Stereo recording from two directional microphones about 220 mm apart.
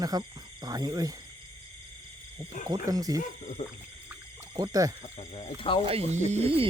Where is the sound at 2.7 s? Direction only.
15° right (ahead or behind).